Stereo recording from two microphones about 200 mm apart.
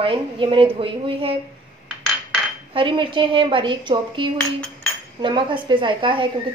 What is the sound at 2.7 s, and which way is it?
A woman's voice, 25° right (ahead or behind).